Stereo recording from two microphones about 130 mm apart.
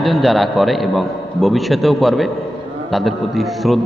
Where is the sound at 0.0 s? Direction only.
Centre (ahead or behind).